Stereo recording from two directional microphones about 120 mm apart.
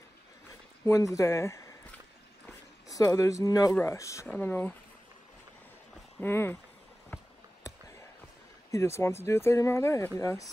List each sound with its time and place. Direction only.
0.8 s speech: 25° left (ahead or behind)
2.9 s speech: 30° left (ahead or behind)
4.3 s speech: 15° left (ahead or behind)
6.2 s speech: 20° left (ahead or behind)
7.1 s a sound: 15° left (ahead or behind)
8.7 s speech: 20° left (ahead or behind)